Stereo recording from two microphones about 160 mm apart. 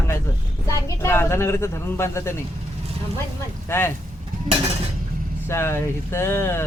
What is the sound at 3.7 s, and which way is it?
Speech, 15° left (ahead or behind).